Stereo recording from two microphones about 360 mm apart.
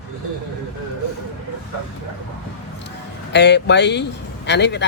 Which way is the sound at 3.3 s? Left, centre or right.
Left.